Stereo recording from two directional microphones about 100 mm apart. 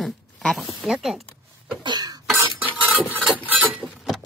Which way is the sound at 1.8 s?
45° right (ahead or behind).